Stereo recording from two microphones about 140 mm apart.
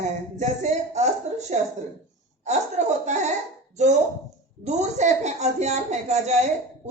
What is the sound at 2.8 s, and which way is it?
A woman's voice, 60° right (ahead or behind).